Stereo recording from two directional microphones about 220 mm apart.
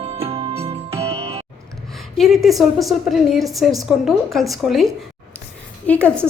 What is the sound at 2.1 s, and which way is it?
A woman's voice, centre (ahead or behind).